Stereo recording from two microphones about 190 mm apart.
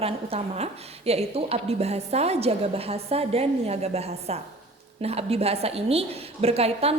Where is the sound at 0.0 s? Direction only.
30° right (ahead or behind).